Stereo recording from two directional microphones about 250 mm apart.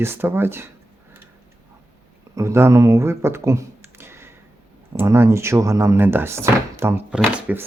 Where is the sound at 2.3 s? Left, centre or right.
Centre.